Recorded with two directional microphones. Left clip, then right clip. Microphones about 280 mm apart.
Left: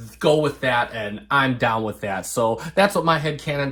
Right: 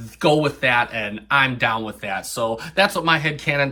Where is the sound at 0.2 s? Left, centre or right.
Centre.